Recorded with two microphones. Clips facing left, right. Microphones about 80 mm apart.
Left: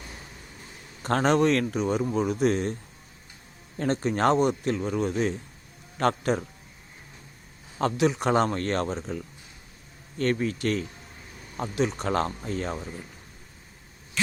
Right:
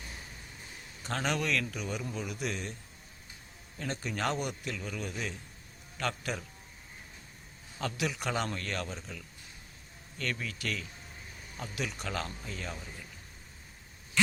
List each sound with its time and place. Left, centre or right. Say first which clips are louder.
1.0 s speech: left 11 dB; left
3.8 s a man's voice: left 10 dB; left
7.8 s speech: left 11 dB; left